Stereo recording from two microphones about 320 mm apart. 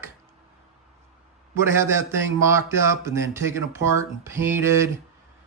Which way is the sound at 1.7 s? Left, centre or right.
Centre.